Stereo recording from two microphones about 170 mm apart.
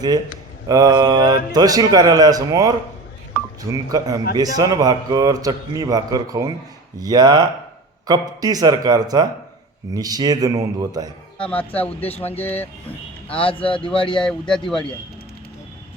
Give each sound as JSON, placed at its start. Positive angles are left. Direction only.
{"t": 0.7, "sound": "a man's voice", "side_deg": -25}
{"t": 11.3, "sound": "speech", "side_deg": 10}
{"t": 13.4, "sound": "speech", "side_deg": 30}
{"t": 14.2, "sound": "speech", "side_deg": 5}